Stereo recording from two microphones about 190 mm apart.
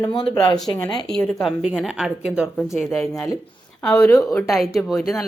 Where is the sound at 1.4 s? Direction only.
5° right (ahead or behind).